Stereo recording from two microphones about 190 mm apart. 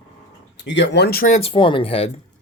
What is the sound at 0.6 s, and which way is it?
Speech, 70° left (ahead or behind).